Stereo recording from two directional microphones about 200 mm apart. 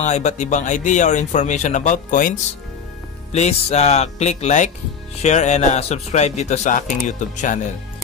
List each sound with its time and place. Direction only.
0.0 s speech: 35° left (ahead or behind)